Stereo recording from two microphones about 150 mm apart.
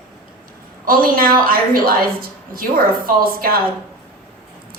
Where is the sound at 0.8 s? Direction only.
70° right (ahead or behind).